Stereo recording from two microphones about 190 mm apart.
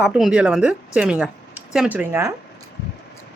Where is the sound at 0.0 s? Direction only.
5° right (ahead or behind).